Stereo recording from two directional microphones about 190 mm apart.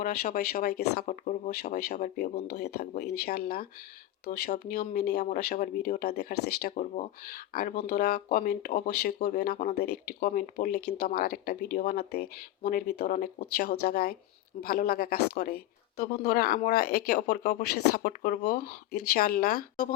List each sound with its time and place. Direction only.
0.0 s speech: 50° left (ahead or behind)
1.7 s speech: 55° left (ahead or behind)